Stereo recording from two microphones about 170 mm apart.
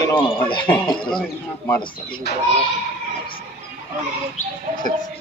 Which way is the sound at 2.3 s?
75° left (ahead or behind).